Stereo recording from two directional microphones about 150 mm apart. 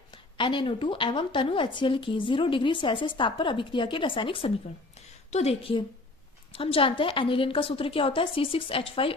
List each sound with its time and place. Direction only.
0.1 s a woman's voice: 30° left (ahead or behind)
4.9 s a sound: 45° left (ahead or behind)
6.5 s a woman's voice: 40° left (ahead or behind)